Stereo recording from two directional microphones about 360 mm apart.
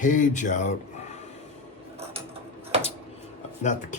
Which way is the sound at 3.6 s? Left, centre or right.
Centre.